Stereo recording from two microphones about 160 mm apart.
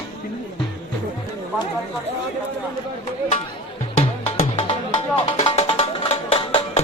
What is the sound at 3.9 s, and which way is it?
Music, 40° left (ahead or behind).